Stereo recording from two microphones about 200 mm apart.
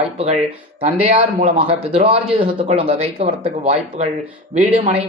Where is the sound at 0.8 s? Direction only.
30° right (ahead or behind).